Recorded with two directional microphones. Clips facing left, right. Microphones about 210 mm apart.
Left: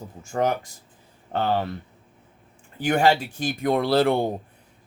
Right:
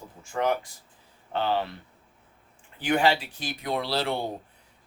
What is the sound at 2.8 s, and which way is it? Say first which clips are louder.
Speech: left 3 dB; 45° left (ahead or behind).